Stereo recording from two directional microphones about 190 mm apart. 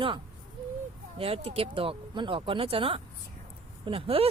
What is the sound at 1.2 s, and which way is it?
Speech, 30° right (ahead or behind).